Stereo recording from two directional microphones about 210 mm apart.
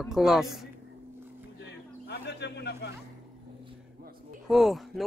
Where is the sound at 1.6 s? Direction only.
55° left (ahead or behind).